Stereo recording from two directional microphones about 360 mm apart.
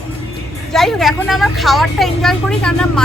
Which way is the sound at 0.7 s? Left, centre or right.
Centre.